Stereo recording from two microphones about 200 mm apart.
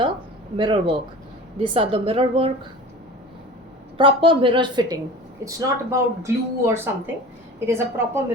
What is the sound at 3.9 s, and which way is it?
A woman's voice, 25° right (ahead or behind).